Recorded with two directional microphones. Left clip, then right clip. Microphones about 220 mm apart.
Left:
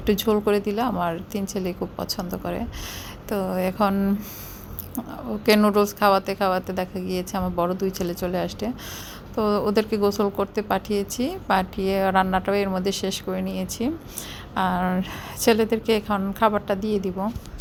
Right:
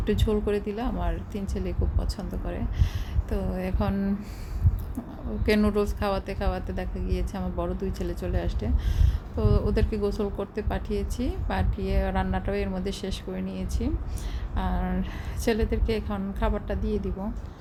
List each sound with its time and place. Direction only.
0.0 s a woman's voice: 15° left (ahead or behind)
5.5 s a woman's voice: 15° left (ahead or behind)